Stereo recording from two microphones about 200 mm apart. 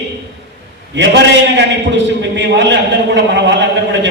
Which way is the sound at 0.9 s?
60° right (ahead or behind).